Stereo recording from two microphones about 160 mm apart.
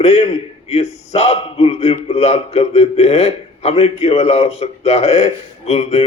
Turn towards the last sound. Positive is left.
turn(degrees=40)  # may be behind; listen again after turning